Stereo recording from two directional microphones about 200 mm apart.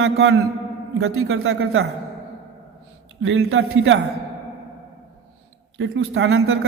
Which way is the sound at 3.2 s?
90° right.